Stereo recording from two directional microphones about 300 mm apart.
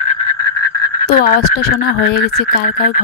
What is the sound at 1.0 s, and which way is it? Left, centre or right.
Speech, left.